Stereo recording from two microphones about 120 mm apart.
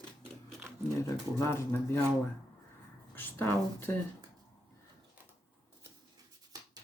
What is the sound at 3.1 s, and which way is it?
Speech, 20° left (ahead or behind).